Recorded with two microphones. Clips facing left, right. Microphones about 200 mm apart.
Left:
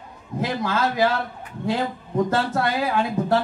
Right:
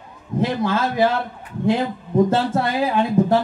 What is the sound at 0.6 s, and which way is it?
Speech, 25° right (ahead or behind).